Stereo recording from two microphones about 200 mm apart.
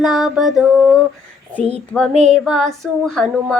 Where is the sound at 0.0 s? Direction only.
Centre (ahead or behind).